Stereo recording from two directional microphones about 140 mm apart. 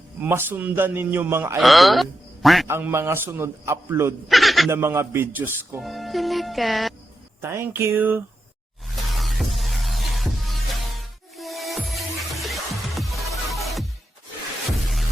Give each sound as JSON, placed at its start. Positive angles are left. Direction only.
{"t": 0.2, "sound": "a man's voice", "side_deg": -15}
{"t": 1.5, "sound": "speech", "side_deg": 0}
{"t": 2.6, "sound": "a man's voice", "side_deg": -15}
{"t": 4.3, "sound": "music", "side_deg": 0}
{"t": 4.7, "sound": "a man's voice", "side_deg": -20}
{"t": 5.8, "sound": "music", "side_deg": 0}
{"t": 7.4, "sound": "a man's voice", "side_deg": -15}
{"t": 9.1, "sound": "music", "side_deg": 0}